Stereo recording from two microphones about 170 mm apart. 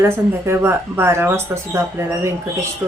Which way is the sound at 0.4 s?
15° right (ahead or behind).